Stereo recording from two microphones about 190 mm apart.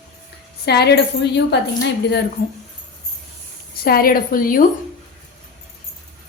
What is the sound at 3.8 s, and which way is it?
Speech, 50° left (ahead or behind).